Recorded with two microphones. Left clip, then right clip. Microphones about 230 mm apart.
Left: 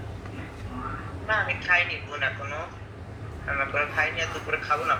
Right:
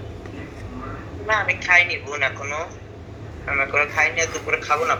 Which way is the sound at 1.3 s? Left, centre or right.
Right.